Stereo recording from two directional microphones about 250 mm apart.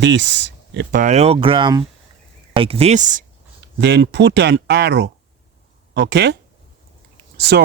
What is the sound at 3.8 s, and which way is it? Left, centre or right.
Speech, right.